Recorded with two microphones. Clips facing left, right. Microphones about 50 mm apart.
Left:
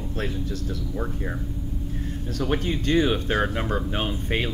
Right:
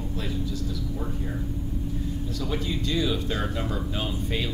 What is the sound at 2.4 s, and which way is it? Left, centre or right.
Speech, left.